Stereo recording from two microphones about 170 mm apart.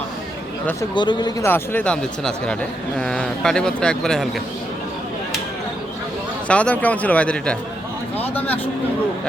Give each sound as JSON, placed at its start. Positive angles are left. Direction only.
{"t": 0.9, "sound": "speech", "side_deg": 25}
{"t": 1.5, "sound": "speech", "side_deg": 10}
{"t": 6.5, "sound": "speech", "side_deg": 5}